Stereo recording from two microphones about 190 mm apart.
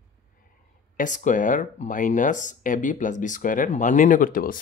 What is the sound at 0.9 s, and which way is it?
Speech, 40° left (ahead or behind).